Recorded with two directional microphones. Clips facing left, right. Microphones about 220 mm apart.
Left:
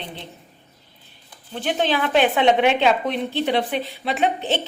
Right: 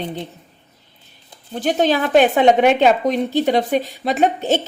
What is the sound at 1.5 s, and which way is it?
A woman's voice, 40° right (ahead or behind).